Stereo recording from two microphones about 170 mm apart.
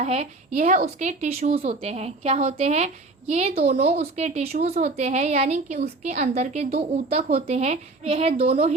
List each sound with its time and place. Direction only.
0.0 s a woman's voice: 40° right (ahead or behind)